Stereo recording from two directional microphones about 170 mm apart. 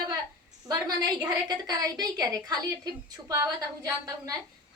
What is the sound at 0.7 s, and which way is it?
A woman's voice, 20° right (ahead or behind).